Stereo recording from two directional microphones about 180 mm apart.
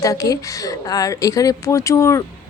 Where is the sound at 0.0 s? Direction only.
20° left (ahead or behind).